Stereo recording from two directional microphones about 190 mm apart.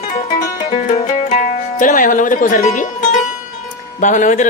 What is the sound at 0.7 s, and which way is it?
Music, 40° left (ahead or behind).